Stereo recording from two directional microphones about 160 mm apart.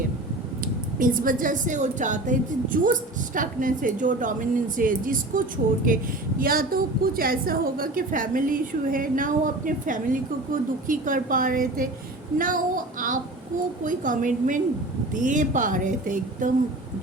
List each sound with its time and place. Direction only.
0.6 s a woman's voice: 60° right (ahead or behind)